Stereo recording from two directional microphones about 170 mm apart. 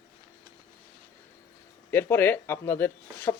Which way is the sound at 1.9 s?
10° left (ahead or behind).